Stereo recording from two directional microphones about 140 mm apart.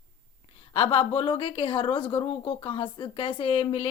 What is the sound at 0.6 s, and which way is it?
A woman's voice, 40° left (ahead or behind).